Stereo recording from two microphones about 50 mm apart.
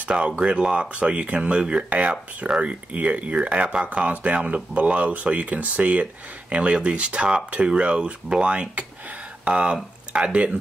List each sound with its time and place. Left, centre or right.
0.4 s speech: right